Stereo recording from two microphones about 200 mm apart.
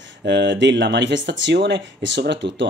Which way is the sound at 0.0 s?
60° right (ahead or behind).